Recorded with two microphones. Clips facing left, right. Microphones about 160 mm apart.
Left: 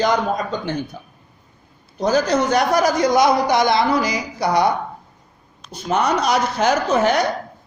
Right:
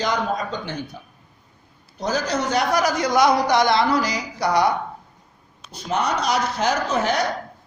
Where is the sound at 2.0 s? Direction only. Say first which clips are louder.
Left 6 dB; 55° left (ahead or behind).